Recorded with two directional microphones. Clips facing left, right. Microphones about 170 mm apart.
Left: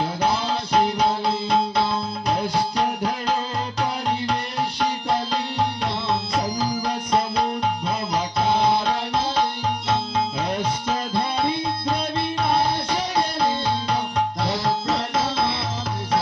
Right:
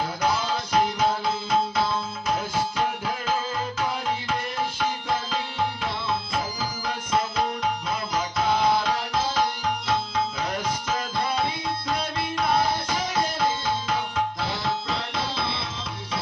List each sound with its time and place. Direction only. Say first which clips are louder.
0.2 s music: left 1 dB; 35° left (ahead or behind)
6.6 s music: left 6 dB; 35° left (ahead or behind)